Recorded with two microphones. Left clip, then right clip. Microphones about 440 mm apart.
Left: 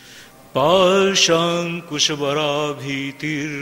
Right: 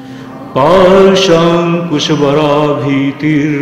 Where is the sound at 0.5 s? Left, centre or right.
Left.